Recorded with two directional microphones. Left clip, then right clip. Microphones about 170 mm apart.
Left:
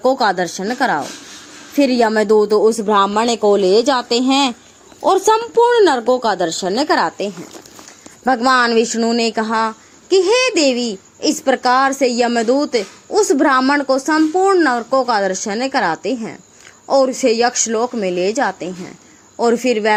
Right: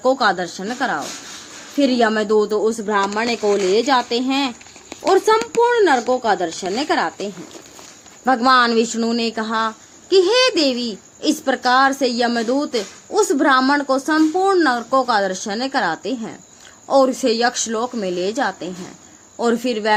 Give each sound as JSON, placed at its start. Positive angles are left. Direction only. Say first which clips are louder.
{"t": 0.0, "sound": "speech", "louder": "left 2 dB", "side_deg": 35}
{"t": 4.1, "sound": "a woman's voice", "louder": "left 5 dB", "side_deg": 40}